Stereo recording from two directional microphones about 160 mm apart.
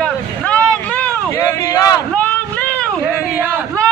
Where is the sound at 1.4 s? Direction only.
20° left (ahead or behind).